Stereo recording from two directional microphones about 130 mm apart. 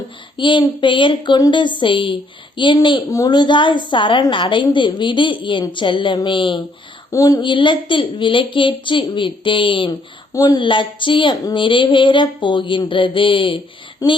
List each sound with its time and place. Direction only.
0.3 s child singing: 40° left (ahead or behind)
0.8 s speech: 40° left (ahead or behind)
7.1 s a woman's voice: 25° left (ahead or behind)
7.5 s speech: 40° left (ahead or behind)
10.3 s speech: 30° left (ahead or behind)